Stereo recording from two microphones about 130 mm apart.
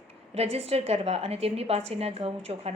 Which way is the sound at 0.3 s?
50° right (ahead or behind).